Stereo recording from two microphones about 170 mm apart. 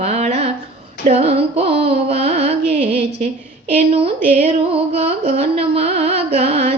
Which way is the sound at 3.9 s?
35° right (ahead or behind).